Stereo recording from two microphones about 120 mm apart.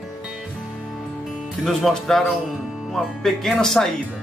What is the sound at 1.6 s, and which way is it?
A man's voice, centre (ahead or behind).